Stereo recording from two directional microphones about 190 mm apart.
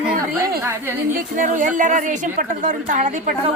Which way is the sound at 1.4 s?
45° right (ahead or behind).